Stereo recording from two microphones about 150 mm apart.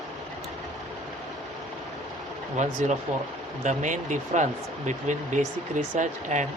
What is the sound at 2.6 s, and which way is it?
Speech, 55° right (ahead or behind).